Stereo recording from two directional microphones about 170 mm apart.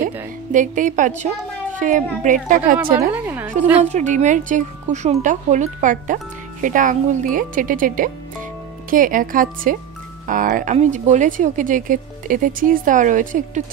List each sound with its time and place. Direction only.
0.0 s music: 50° right (ahead or behind)
1.8 s speech: 50° right (ahead or behind)
3.1 s a woman's voice: 10° right (ahead or behind)
3.9 s speech: 45° right (ahead or behind)